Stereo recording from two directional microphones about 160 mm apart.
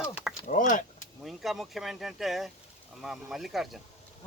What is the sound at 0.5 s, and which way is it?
Speech, 55° left (ahead or behind).